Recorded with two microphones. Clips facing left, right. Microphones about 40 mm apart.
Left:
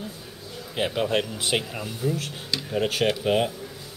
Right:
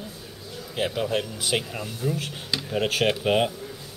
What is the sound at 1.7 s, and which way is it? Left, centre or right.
Speech, centre.